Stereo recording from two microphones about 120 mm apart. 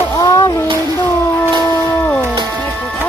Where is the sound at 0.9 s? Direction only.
20° left (ahead or behind).